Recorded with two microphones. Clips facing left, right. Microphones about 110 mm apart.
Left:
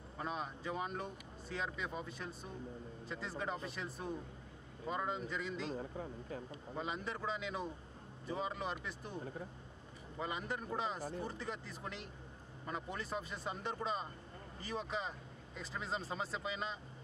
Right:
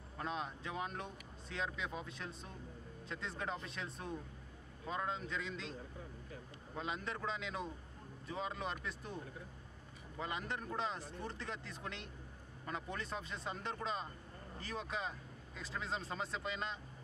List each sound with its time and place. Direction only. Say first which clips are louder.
0.2 s speech: even; centre (ahead or behind)
5.8 s speech: left 7 dB; 45° left (ahead or behind)
6.7 s speech: left 1 dB; centre (ahead or behind)